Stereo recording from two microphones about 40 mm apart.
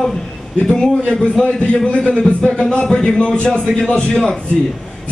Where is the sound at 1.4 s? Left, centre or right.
Left.